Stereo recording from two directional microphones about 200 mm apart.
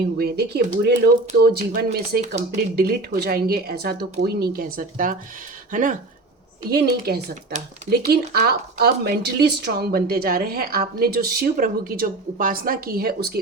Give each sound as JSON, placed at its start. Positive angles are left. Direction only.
{"t": 0.2, "sound": "speech", "side_deg": -50}
{"t": 6.7, "sound": "speech", "side_deg": -55}